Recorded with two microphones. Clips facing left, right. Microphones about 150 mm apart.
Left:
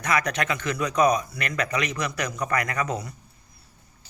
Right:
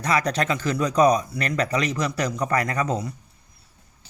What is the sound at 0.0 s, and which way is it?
Speech, 30° right (ahead or behind).